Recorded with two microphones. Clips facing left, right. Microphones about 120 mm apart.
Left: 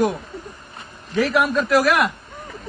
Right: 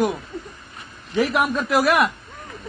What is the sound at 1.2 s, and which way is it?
Speech, 15° right (ahead or behind).